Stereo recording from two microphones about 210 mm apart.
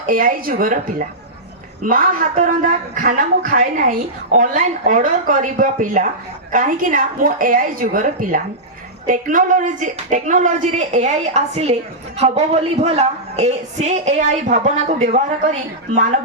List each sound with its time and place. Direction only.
0.0 s speech: 40° right (ahead or behind)